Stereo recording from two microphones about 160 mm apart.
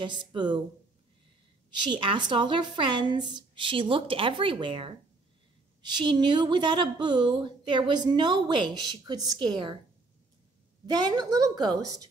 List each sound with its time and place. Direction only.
0.0 s a woman's voice: 30° right (ahead or behind)
1.7 s a woman's voice: 30° right (ahead or behind)
10.9 s a woman's voice: 25° right (ahead or behind)